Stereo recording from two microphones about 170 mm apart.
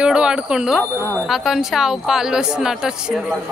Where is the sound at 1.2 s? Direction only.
Centre (ahead or behind).